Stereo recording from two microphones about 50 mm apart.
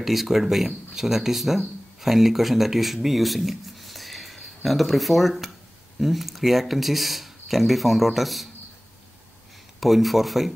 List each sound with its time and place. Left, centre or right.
0.0 s speech: centre
9.8 s speech: centre